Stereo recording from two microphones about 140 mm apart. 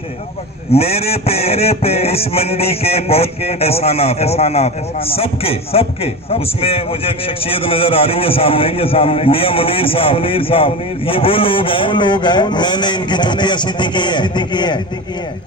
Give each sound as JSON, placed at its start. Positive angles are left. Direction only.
{"t": 0.7, "sound": "music", "side_deg": 45}
{"t": 6.3, "sound": "a man's voice", "side_deg": 45}